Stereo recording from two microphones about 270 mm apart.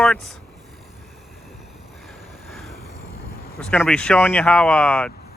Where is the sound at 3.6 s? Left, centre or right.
Centre.